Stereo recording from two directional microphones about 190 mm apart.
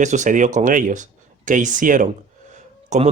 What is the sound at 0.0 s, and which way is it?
Speech, 40° right (ahead or behind).